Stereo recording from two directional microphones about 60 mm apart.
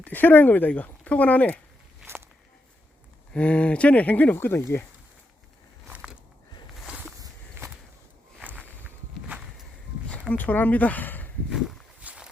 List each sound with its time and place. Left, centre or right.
0.0 s speech: left
3.3 s speech: centre
4.4 s speech: left
7.6 s a sound: right
8.8 s walk: right
10.3 s speech: left
11.4 s a sound: centre
11.9 s boat: right